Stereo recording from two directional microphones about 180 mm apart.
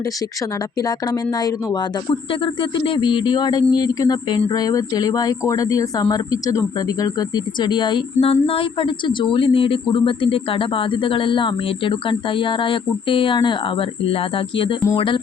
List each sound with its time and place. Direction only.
0.8 s speech: 20° left (ahead or behind)